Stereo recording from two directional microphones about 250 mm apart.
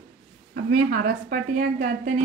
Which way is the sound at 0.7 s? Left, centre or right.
Right.